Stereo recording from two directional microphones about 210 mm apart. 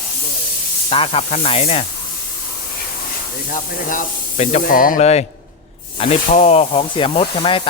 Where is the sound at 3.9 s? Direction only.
35° left (ahead or behind).